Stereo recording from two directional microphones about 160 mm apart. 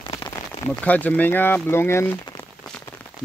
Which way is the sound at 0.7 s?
10° left (ahead or behind).